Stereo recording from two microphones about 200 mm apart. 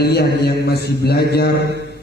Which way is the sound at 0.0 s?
55° left (ahead or behind).